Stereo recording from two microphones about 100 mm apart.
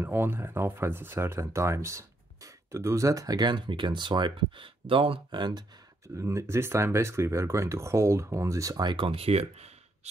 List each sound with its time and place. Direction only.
0.0 s speech: 20° right (ahead or behind); by 5.7 s 45° right (ahead or behind)
6.0 s speech: 30° right (ahead or behind)
8.9 s speech: 65° right (ahead or behind)